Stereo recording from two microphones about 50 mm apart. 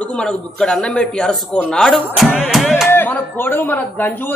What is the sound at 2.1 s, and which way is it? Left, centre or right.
Music, centre.